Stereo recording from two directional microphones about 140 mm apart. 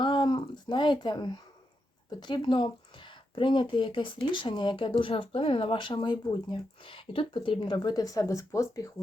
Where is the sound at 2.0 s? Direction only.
35° left (ahead or behind).